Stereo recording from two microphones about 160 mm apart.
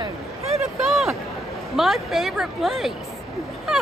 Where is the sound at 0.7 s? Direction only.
Centre (ahead or behind).